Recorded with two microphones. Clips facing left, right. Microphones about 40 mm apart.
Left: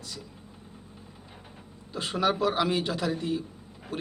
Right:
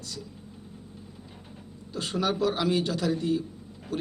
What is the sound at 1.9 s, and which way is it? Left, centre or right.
A man's voice, centre.